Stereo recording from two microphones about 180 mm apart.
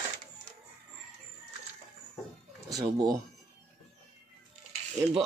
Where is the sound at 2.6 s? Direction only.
20° right (ahead or behind).